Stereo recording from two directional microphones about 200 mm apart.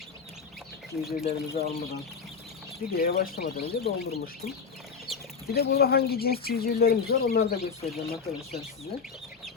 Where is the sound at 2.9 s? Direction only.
45° left (ahead or behind).